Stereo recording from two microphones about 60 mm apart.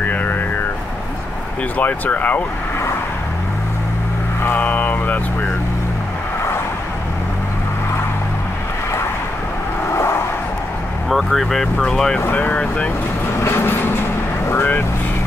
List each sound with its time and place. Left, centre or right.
0.1 s a sound: left
1.8 s speech: left
4.6 s speech: left
9.9 s vehicle: left
11.1 s speech: centre
12.3 s speech: left
13.4 s train: left
14.5 s speech: left